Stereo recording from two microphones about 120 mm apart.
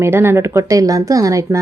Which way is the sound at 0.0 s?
20° right (ahead or behind).